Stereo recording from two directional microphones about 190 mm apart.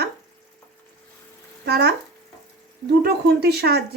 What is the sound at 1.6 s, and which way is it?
Speech, 55° right (ahead or behind).